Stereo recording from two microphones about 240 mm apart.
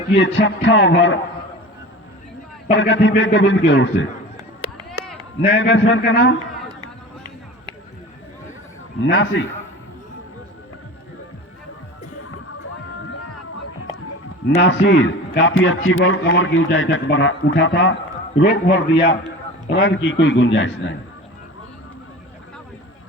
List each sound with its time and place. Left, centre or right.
0.1 s a man's voice: left
2.7 s a man's voice: left
4.6 s a sound: left
5.4 s a man's voice: left
9.0 s a man's voice: left
14.6 s a man's voice: left